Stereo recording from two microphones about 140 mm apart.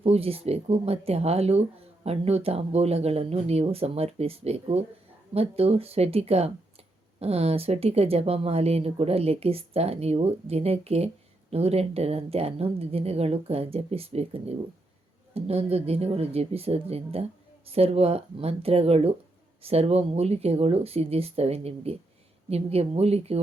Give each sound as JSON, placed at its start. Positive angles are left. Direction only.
{"t": 0.0, "sound": "speech", "side_deg": -45}